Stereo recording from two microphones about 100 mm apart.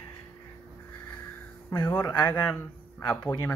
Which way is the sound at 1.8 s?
25° left (ahead or behind).